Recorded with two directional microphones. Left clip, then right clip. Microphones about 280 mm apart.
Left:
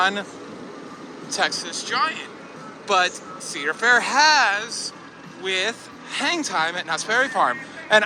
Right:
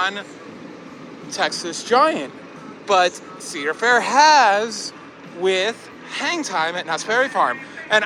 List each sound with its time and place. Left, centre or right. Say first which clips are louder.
0.0 s speech: left 2 dB; centre
1.3 s a man's voice: right 1 dB; centre